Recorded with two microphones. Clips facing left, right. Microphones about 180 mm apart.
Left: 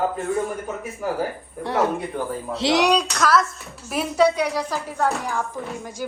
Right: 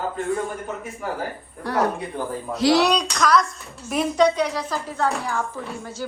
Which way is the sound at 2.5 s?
25° left (ahead or behind).